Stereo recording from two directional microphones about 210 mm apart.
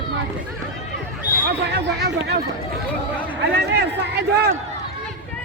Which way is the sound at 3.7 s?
55° right (ahead or behind).